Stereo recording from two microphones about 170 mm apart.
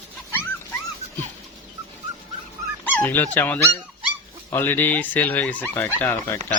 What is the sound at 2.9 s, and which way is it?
Speech, 10° left (ahead or behind).